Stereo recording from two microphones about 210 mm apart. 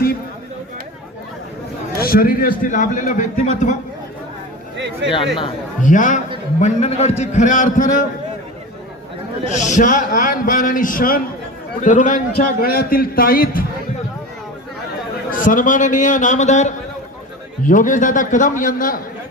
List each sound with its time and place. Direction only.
2.0 s a man's voice: 45° left (ahead or behind)
4.8 s a sound: 55° right (ahead or behind)
5.8 s a man's voice: 35° left (ahead or behind)
9.5 s a man's voice: 35° left (ahead or behind)
15.3 s a man's voice: 40° left (ahead or behind)